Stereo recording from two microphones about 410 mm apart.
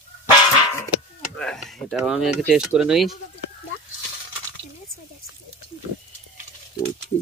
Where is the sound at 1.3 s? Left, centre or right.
Centre.